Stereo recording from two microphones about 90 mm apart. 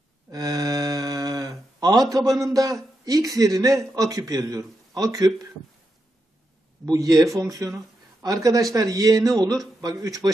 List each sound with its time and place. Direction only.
0.3 s speech: 45° right (ahead or behind)
6.9 s a man's voice: 45° right (ahead or behind)